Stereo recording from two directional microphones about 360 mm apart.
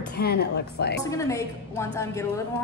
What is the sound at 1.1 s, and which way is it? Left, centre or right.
A woman's voice, centre.